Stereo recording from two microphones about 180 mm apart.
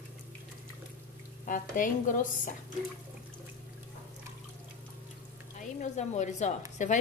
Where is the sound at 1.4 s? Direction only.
45° left (ahead or behind).